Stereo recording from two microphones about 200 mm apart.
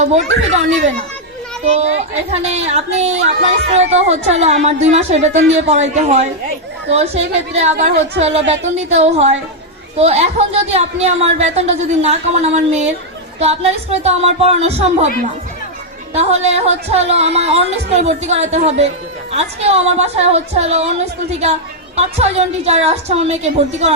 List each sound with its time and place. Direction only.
0.0 s speech: 35° right (ahead or behind)
1.6 s speech: 35° right (ahead or behind)
8.4 s speech: 65° right (ahead or behind)
8.7 s speech: 35° right (ahead or behind)
16.1 s speech: 30° right (ahead or behind)